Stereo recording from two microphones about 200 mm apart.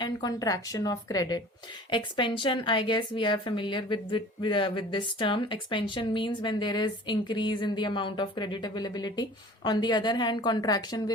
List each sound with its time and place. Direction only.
0.0 s a woman's voice: 20° left (ahead or behind)